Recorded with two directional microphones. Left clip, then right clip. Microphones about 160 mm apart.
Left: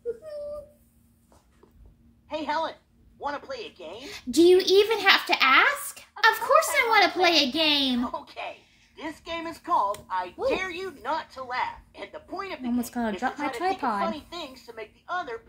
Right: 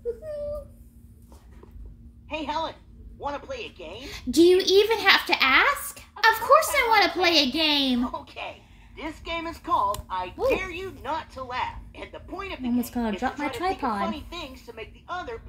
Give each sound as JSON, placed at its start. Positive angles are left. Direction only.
{"t": 2.2, "sound": "a woman's voice", "side_deg": -5}
{"t": 8.1, "sound": "speech", "side_deg": 25}
{"t": 8.9, "sound": "speech", "side_deg": -5}
{"t": 11.0, "sound": "speech", "side_deg": -10}
{"t": 13.7, "sound": "a child's voice", "side_deg": 15}
{"t": 14.0, "sound": "speech", "side_deg": -5}